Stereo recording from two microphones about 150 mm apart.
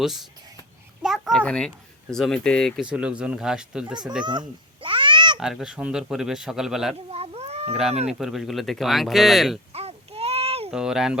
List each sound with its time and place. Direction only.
0.0 s speech: centre (ahead or behind)
1.0 s a sound: centre (ahead or behind)
1.5 s speech: 5° left (ahead or behind)
4.3 s cat: 30° right (ahead or behind)
5.4 s speech: 5° right (ahead or behind)
7.1 s cat: 45° right (ahead or behind)
8.0 s speech: centre (ahead or behind)
9.7 s a sound: 40° right (ahead or behind)
10.7 s speech: 5° right (ahead or behind)